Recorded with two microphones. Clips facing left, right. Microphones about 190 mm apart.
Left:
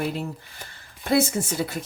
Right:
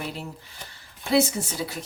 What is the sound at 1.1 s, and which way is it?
Speech, 50° left (ahead or behind).